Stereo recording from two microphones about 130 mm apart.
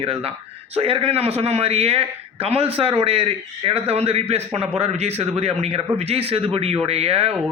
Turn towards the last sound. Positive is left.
turn(degrees=-50)  # may be behind; listen again after turning